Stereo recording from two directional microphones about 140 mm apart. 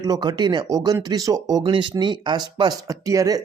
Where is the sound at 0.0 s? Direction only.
30° right (ahead or behind).